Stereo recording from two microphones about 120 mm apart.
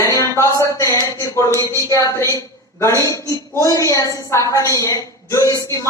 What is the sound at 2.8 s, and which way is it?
A woman's voice, 25° left (ahead or behind).